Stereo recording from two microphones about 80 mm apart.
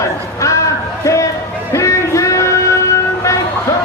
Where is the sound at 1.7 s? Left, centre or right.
Left.